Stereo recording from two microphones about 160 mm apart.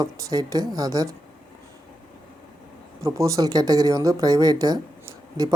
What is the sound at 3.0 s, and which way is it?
Speech, 20° right (ahead or behind).